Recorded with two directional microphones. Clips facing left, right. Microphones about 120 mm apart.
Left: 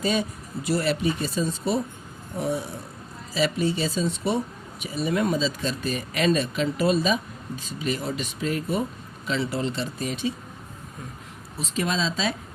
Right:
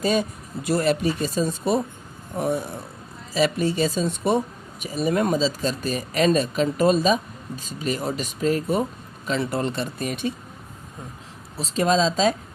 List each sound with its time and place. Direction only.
0.0 s speech: 45° right (ahead or behind)
3.3 s speech: 50° right (ahead or behind)
11.6 s speech: 35° right (ahead or behind)